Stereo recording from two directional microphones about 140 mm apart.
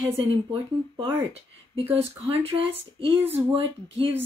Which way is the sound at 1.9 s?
45° right (ahead or behind).